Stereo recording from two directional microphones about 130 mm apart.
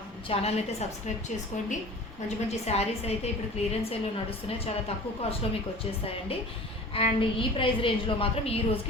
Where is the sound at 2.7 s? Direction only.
60° left (ahead or behind).